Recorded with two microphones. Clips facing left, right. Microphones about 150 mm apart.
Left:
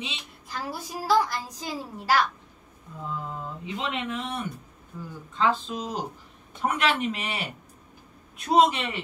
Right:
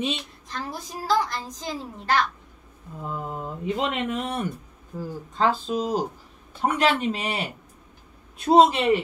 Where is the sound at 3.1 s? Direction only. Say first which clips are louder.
Right 3 dB; 45° right (ahead or behind).